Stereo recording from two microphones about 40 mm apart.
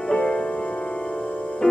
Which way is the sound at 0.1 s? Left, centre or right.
Centre.